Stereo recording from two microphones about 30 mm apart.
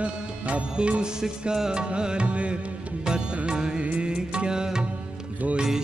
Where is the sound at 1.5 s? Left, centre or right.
Right.